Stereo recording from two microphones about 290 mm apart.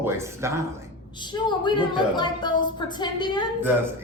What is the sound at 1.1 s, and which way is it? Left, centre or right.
A woman's voice, centre.